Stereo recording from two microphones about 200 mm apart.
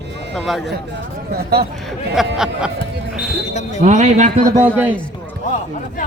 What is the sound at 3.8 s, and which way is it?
Speech, 35° right (ahead or behind).